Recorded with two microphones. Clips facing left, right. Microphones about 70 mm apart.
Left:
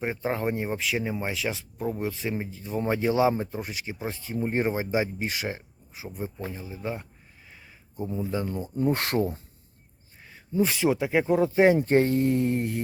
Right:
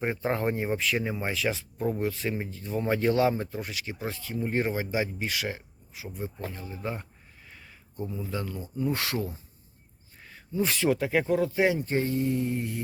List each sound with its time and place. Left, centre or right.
0.0 s speech: centre; by 6.1 s left
6.4 s speech: centre
7.5 s a sound: centre
8.0 s speech: left
8.7 s speech: left
10.2 s a sound: centre
10.6 s speech: centre; by 11.8 s left
11.8 s speech: left